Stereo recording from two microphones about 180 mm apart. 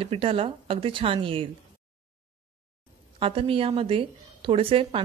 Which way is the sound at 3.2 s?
30° right (ahead or behind).